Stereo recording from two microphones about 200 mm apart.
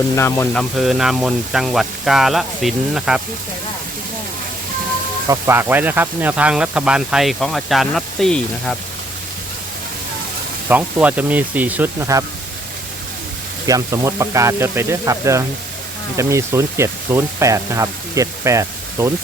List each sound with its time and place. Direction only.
0.2 s speech: 10° left (ahead or behind)
0.8 s speech: centre (ahead or behind)
5.3 s speech: 10° right (ahead or behind)
10.7 s speech: 10° right (ahead or behind)
13.7 s speech: 15° right (ahead or behind)